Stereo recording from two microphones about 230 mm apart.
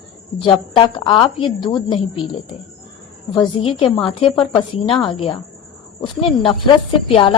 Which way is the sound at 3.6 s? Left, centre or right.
Left.